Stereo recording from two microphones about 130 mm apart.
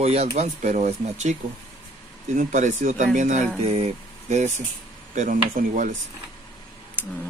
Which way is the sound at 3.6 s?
50° right (ahead or behind).